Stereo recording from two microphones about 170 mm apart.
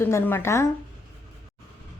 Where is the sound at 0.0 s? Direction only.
15° left (ahead or behind).